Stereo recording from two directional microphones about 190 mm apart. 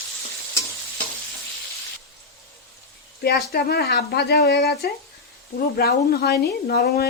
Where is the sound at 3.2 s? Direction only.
60° left (ahead or behind).